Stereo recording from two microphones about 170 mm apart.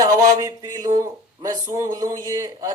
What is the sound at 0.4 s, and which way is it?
Speech, 25° right (ahead or behind).